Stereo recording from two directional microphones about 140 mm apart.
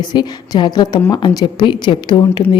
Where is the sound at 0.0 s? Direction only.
30° left (ahead or behind).